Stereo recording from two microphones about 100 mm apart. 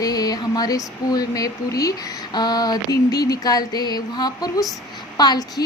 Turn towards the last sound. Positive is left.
turn(degrees=45)  # may be behind; listen again after turning